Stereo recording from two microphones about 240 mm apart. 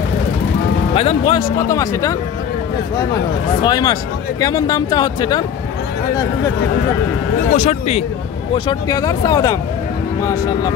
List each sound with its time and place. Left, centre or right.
0.9 s speech: left
3.6 s speech: centre
7.5 s speech: left
8.6 s speech: centre